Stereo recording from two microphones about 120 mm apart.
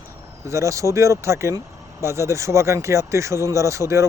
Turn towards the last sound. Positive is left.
turn(degrees=-25)  # may be behind; listen again after turning